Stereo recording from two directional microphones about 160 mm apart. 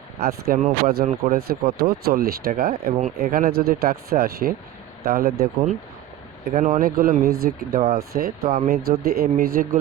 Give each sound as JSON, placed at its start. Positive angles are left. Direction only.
{"t": 0.2, "sound": "speech", "side_deg": -75}
{"t": 6.5, "sound": "speech", "side_deg": -55}